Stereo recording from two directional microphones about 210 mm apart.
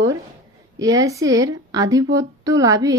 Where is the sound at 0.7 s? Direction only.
15° right (ahead or behind).